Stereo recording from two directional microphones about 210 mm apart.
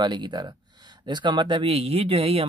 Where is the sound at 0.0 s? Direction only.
20° right (ahead or behind).